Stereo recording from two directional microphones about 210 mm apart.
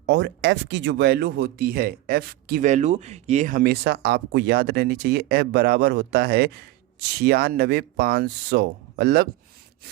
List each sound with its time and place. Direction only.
0.0 s speech: 60° right (ahead or behind)